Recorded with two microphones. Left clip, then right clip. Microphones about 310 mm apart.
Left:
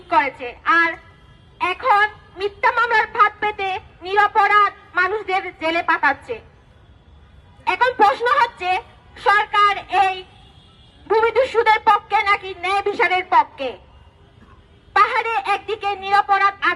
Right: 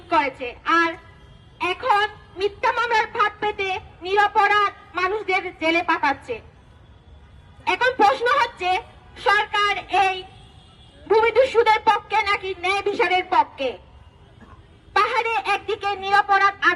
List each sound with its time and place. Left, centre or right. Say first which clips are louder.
0.1 s a woman's voice: left 3 dB; centre
7.6 s a woman's voice: left 2 dB; centre
14.9 s a woman's voice: left 3 dB; centre